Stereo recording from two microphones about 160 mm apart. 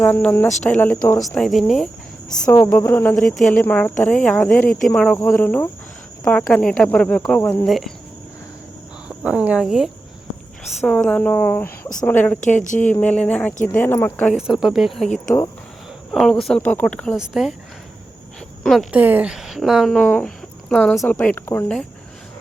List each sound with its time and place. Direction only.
0.0 s speech: 10° left (ahead or behind)
2.7 s speech: 15° left (ahead or behind)
9.0 s speech: 5° right (ahead or behind); by 12.4 s 10° left (ahead or behind)
12.4 s a woman's voice: 50° left (ahead or behind)
12.9 s speech: 10° left (ahead or behind)
14.3 s speech: 5° right (ahead or behind)
16.1 s speech: centre (ahead or behind)
18.6 s speech: centre (ahead or behind)
18.9 s a woman's voice: 10° right (ahead or behind); by 21.8 s 10° left (ahead or behind)